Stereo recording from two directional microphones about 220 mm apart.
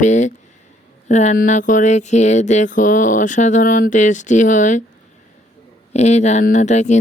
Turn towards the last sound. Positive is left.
turn(degrees=30)  # may be behind; listen again after turning